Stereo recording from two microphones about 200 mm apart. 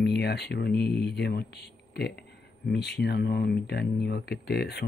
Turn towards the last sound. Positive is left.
turn(degrees=55)  # may be behind; listen again after turning